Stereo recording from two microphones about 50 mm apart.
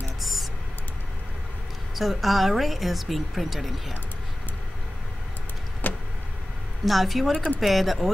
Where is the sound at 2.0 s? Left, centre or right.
Centre.